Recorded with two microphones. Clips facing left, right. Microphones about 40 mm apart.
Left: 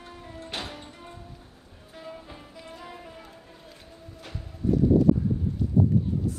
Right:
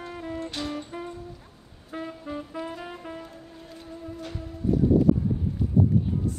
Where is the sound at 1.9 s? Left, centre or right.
Right.